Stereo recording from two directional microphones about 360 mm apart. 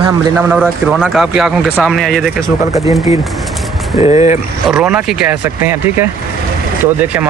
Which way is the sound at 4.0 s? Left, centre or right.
Centre.